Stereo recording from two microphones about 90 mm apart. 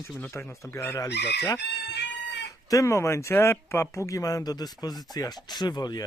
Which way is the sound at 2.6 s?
35° left (ahead or behind).